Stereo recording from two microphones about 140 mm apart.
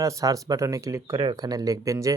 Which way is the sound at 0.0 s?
25° right (ahead or behind).